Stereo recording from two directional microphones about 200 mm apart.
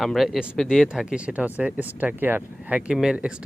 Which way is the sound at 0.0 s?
Centre (ahead or behind).